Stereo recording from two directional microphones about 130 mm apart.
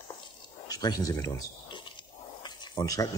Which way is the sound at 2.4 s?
35° left (ahead or behind).